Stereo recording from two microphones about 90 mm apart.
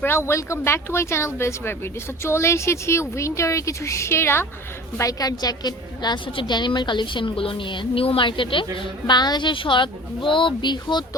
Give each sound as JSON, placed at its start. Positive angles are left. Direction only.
{"t": 0.0, "sound": "speech", "side_deg": 30}
{"t": 4.9, "sound": "a woman's voice", "side_deg": 40}